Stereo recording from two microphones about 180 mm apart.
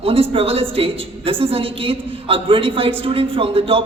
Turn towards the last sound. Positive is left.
turn(degrees=-30)  # may be behind; listen again after turning